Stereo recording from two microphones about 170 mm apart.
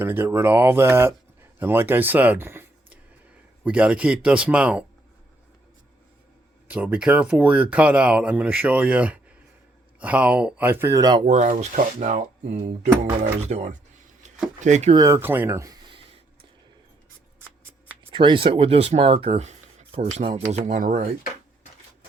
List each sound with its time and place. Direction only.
0.0 s speech: 15° right (ahead or behind)
6.7 s speech: 5° right (ahead or behind)
11.3 s speech: 45° right (ahead or behind)
14.9 s speech: 15° right (ahead or behind)
18.1 s speech: 30° right (ahead or behind); by 21.1 s 45° right (ahead or behind)